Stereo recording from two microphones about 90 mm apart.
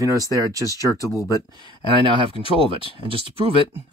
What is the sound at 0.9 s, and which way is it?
Speech, 40° left (ahead or behind).